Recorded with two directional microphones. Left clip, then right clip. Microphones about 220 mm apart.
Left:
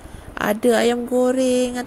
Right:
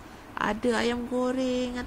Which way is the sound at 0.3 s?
15° left (ahead or behind).